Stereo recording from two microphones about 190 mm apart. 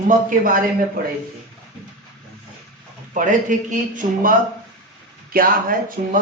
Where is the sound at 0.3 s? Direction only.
45° right (ahead or behind).